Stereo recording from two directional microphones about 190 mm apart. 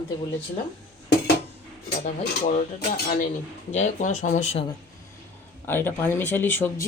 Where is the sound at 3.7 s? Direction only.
40° left (ahead or behind).